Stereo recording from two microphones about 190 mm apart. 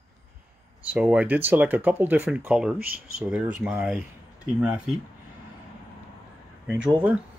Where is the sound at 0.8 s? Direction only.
5° right (ahead or behind).